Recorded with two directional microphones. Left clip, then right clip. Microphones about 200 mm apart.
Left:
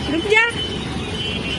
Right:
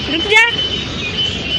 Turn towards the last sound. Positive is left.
turn(degrees=20)  # may be behind; listen again after turning